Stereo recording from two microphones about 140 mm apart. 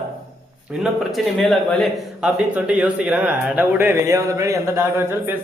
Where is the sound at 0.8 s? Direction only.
Centre (ahead or behind).